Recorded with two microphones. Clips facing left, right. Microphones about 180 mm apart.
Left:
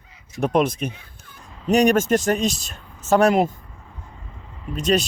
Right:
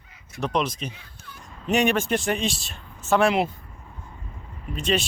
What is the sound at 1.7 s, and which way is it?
Speech, 40° left (ahead or behind).